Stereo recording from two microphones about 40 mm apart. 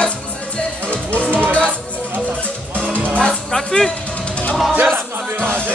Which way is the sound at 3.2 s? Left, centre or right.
Centre.